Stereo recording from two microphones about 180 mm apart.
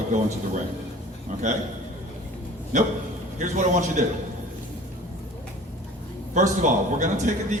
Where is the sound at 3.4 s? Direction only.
40° right (ahead or behind).